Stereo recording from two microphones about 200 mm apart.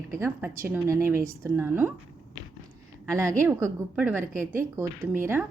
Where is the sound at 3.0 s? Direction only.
15° right (ahead or behind).